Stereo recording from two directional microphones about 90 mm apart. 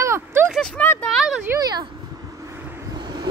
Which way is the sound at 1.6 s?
50° right (ahead or behind).